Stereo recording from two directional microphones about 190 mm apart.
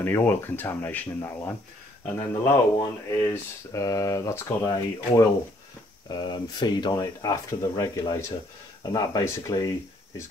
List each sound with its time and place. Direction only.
0.0 s speech: 10° left (ahead or behind)